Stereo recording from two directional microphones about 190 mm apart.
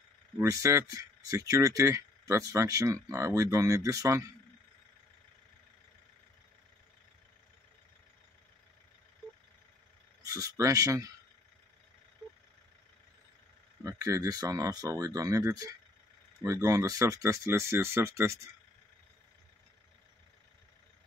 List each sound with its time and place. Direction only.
0.4 s speech: 15° right (ahead or behind)
10.2 s speech: 15° right (ahead or behind)
13.8 s speech: 15° right (ahead or behind)